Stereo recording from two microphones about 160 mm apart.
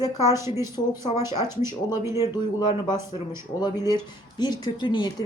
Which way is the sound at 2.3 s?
25° left (ahead or behind).